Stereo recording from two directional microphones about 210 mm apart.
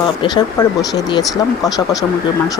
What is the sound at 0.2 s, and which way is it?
Speech, 20° left (ahead or behind).